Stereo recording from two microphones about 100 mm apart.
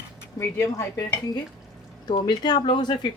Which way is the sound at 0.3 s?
25° left (ahead or behind).